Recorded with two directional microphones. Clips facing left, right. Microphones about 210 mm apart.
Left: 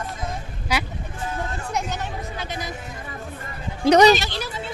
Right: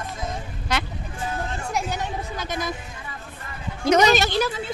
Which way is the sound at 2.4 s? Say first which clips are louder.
Right 3 dB; 45° right (ahead or behind).